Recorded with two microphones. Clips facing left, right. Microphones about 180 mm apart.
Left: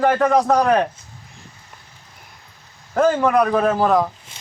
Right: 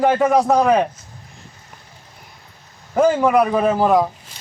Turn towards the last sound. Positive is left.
turn(degrees=-10)  # may be behind; listen again after turning